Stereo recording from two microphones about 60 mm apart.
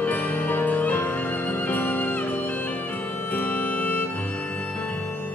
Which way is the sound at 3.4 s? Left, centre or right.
Left.